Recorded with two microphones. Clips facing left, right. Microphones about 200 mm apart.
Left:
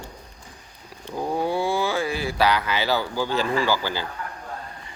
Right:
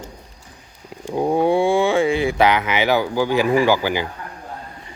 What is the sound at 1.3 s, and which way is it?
A man's voice, 25° right (ahead or behind).